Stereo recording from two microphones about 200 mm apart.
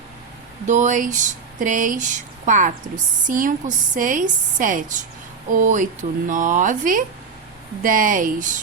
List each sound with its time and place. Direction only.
0.6 s speech: 35° right (ahead or behind)